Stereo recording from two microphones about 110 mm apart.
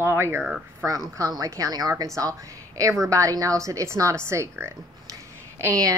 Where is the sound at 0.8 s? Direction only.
30° right (ahead or behind).